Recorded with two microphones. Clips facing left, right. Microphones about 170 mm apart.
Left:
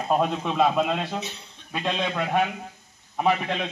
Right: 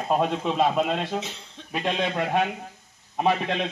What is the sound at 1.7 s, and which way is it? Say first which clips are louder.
A man's voice: right 1 dB; 20° right (ahead or behind).